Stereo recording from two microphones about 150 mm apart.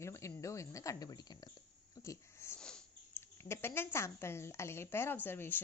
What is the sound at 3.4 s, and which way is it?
A woman's voice, 15° left (ahead or behind).